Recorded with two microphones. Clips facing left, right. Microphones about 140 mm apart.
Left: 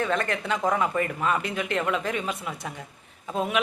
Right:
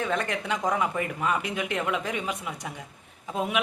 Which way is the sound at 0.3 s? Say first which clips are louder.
Left 2 dB; 15° right (ahead or behind).